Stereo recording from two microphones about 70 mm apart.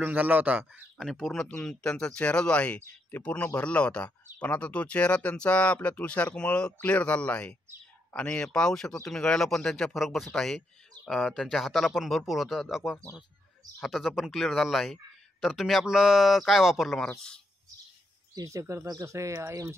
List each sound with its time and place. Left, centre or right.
0.0 s speech: right
0.9 s speech: centre
1.3 s speech: centre
9.9 s speech: centre
18.3 s speech: right